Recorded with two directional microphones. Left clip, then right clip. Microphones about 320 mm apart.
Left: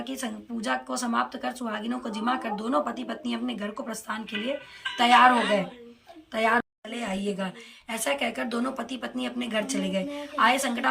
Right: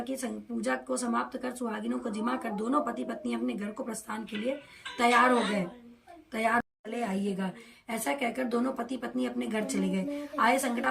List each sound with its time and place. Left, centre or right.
0.0 s speech: centre